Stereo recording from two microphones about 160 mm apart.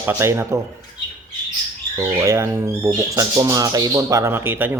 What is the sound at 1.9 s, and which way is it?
Speech, 20° right (ahead or behind).